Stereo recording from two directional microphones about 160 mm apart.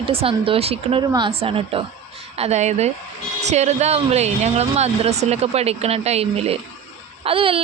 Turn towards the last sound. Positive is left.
turn(degrees=-35)  # may be behind; listen again after turning